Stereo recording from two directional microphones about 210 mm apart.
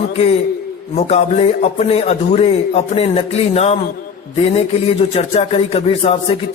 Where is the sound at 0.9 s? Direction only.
30° left (ahead or behind).